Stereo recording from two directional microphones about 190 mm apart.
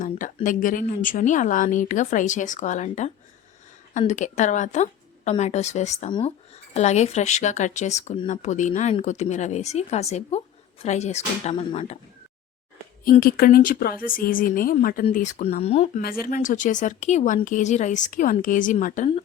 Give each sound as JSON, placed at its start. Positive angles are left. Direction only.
{"t": 0.4, "sound": "speech", "side_deg": 45}
{"t": 6.1, "sound": "speech", "side_deg": 25}
{"t": 6.7, "sound": "speech", "side_deg": 35}
{"t": 13.1, "sound": "speech", "side_deg": 50}
{"t": 16.0, "sound": "speech", "side_deg": 50}